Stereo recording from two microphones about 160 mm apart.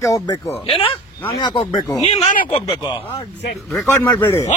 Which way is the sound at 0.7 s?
35° left (ahead or behind).